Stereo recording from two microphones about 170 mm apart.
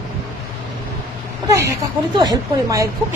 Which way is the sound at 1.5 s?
15° right (ahead or behind).